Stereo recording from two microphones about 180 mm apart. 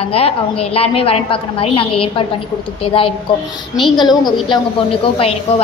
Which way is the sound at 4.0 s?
25° left (ahead or behind).